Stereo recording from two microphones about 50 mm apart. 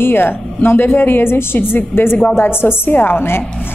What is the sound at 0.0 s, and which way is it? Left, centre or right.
A woman's voice, left.